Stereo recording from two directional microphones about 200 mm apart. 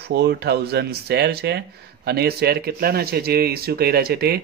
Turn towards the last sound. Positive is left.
turn(degrees=-50)  # may be behind; listen again after turning